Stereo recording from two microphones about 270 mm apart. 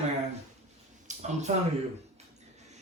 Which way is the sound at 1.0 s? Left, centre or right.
Right.